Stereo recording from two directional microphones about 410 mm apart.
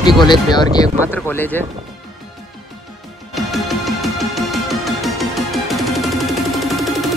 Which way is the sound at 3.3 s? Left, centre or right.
Centre.